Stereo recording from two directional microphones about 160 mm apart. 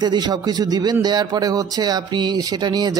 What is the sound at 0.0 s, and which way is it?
Speech, 25° right (ahead or behind).